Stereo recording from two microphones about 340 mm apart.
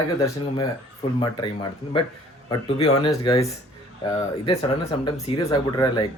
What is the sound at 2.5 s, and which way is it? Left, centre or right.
Speech, centre.